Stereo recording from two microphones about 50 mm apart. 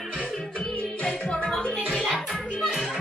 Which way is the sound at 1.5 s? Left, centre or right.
Centre.